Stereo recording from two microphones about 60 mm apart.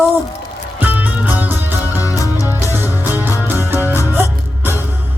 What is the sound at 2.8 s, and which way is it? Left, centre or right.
Music, right.